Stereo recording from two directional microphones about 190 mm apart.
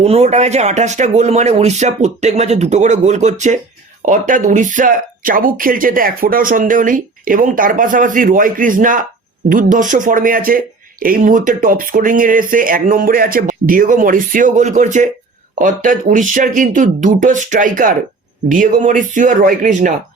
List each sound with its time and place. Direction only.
0.0 s speech: 35° right (ahead or behind)